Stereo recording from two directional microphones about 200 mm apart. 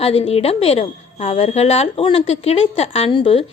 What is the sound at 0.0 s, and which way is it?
A woman's voice, 30° left (ahead or behind).